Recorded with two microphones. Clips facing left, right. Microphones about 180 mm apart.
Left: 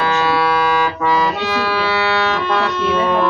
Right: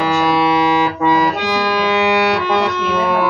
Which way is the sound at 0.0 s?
15° right (ahead or behind).